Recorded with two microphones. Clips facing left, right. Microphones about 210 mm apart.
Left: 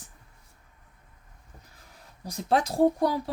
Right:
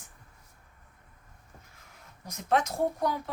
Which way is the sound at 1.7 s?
35° left (ahead or behind).